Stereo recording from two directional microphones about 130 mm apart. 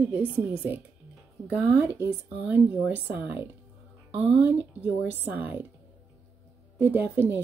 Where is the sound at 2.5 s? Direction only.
10° right (ahead or behind).